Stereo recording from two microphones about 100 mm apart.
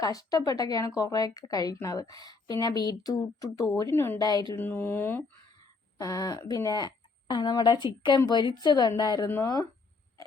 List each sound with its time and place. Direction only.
0.0 s speech: 40° left (ahead or behind)
4.2 s speech: 40° left (ahead or behind)
4.5 s speech: 25° left (ahead or behind)
6.0 s a woman's voice: 35° left (ahead or behind)